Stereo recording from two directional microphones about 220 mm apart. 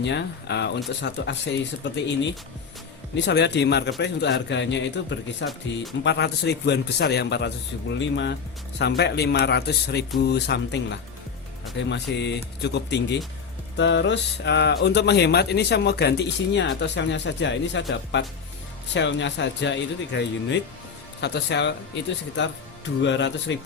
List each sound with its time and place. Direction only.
0.0 s speech: 55° left (ahead or behind)
3.2 s speech: 50° left (ahead or behind)
23.0 s speech: 55° left (ahead or behind)